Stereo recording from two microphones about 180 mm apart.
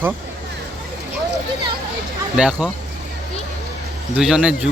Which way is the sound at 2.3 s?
5° right (ahead or behind).